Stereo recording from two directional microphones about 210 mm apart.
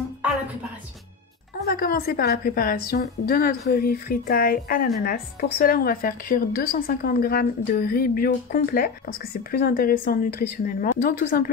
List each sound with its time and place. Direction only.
1.7 s a woman's voice: 45° left (ahead or behind)